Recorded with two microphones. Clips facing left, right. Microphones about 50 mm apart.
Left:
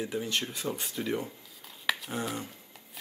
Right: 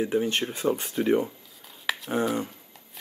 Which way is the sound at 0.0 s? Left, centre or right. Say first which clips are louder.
Right 7 dB; right.